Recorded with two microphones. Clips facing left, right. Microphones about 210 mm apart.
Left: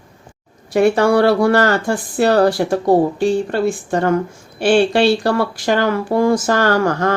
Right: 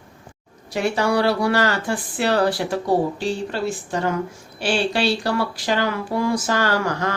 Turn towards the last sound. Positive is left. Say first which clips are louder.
# left 6 dB
turn(degrees=50)  # may be behind; listen again after turning